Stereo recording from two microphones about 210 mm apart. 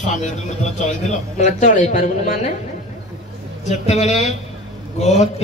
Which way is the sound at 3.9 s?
30° left (ahead or behind).